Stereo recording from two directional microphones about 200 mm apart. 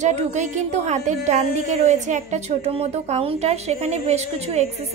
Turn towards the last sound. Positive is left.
turn(degrees=-35)  # may be behind; listen again after turning